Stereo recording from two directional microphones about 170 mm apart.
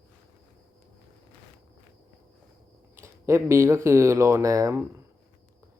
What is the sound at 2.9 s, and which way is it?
Speech, 15° right (ahead or behind).